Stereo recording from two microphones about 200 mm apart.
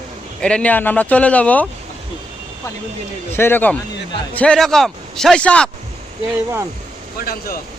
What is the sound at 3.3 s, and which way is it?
Speech, 10° left (ahead or behind).